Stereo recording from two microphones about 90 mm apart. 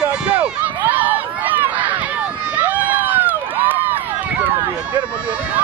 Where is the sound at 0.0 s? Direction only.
15° right (ahead or behind).